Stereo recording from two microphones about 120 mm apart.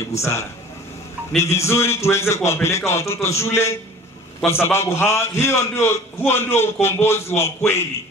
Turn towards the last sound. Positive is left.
turn(degrees=20)  # may be behind; listen again after turning